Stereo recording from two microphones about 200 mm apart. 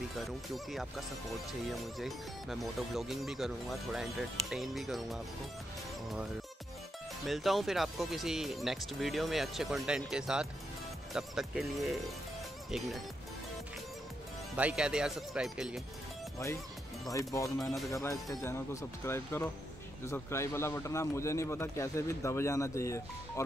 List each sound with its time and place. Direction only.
0.1 s speech: centre (ahead or behind)
7.2 s speech: centre (ahead or behind)
14.6 s speech: 5° right (ahead or behind)
17.1 s a man's voice: 15° left (ahead or behind)